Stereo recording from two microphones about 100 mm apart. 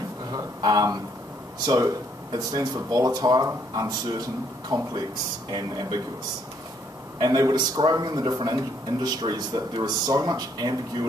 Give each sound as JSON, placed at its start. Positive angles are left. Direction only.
{"t": 0.3, "sound": "a sound", "side_deg": -40}
{"t": 2.3, "sound": "a man's voice", "side_deg": -40}
{"t": 7.2, "sound": "a man's voice", "side_deg": -40}